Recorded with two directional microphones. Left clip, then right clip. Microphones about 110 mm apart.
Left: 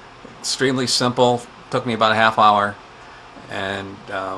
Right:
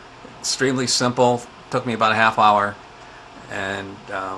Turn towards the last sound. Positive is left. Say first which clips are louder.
# left 1 dB
turn(degrees=30)  # may be behind; listen again after turning